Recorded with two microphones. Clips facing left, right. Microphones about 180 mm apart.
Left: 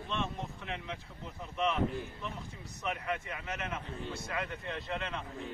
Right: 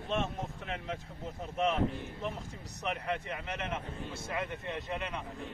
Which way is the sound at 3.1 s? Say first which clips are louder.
Right 1 dB; 30° right (ahead or behind).